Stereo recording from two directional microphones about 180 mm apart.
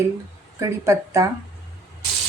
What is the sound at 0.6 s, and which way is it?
Speech, 15° right (ahead or behind).